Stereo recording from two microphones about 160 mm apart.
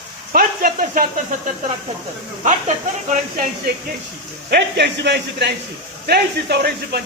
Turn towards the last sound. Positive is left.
turn(degrees=-80)